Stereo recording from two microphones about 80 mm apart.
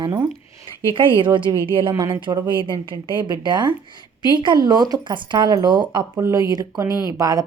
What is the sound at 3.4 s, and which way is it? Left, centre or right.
Speech, right.